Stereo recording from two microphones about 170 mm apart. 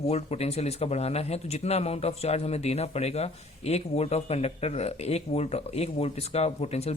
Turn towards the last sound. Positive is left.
turn(degrees=40)  # may be behind; listen again after turning